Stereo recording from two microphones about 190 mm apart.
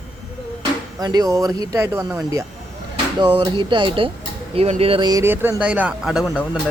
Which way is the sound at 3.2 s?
25° right (ahead or behind).